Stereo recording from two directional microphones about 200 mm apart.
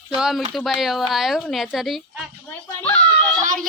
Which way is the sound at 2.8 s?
10° left (ahead or behind).